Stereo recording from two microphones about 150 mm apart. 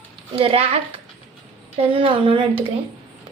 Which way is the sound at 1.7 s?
40° right (ahead or behind).